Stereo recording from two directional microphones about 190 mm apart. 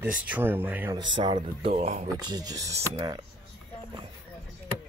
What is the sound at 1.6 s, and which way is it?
Speech, 35° right (ahead or behind).